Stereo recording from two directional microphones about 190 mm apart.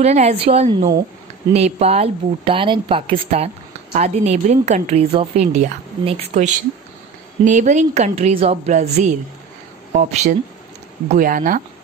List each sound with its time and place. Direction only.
0.0 s speech: 35° right (ahead or behind)
0.7 s a woman's voice: 25° right (ahead or behind)
1.5 s speech: 35° right (ahead or behind)